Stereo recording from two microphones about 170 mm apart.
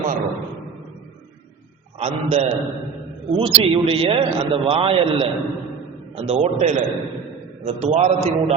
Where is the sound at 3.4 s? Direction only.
30° right (ahead or behind).